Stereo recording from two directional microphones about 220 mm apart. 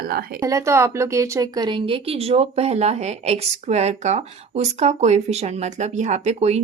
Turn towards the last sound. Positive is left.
turn(degrees=-30)  # may be behind; listen again after turning